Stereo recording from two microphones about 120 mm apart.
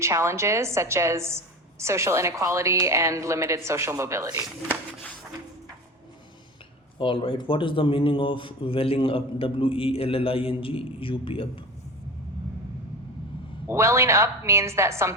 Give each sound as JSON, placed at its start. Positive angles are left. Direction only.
{"t": 0.0, "sound": "a woman's voice", "side_deg": -25}
{"t": 7.0, "sound": "a man's voice", "side_deg": 50}
{"t": 13.7, "sound": "a woman's voice", "side_deg": -25}